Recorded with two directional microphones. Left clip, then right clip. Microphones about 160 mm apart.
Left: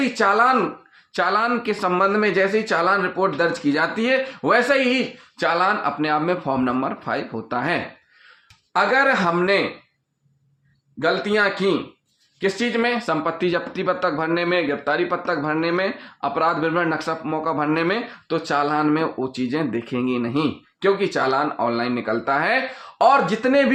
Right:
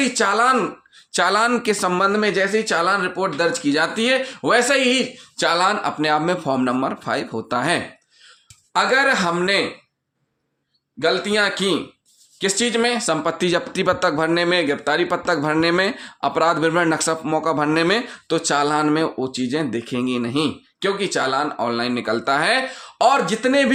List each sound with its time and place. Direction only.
0.0 s speech: 10° right (ahead or behind)
1.1 s speech: 40° right (ahead or behind); by 5.0 s 15° right (ahead or behind)
5.4 s speech: 30° right (ahead or behind)
8.7 s speech: 10° right (ahead or behind)
11.0 s speech: 10° right (ahead or behind)
12.4 s speech: 25° right (ahead or behind)
23.0 s speech: 10° right (ahead or behind)